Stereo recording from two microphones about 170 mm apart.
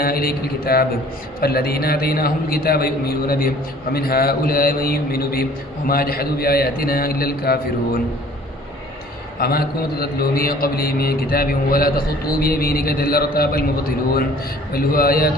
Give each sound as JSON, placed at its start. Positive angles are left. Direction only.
{"t": 0.0, "sound": "a man's voice", "side_deg": 60}
{"t": 9.4, "sound": "a man's voice", "side_deg": 65}
{"t": 14.7, "sound": "a man's voice", "side_deg": 60}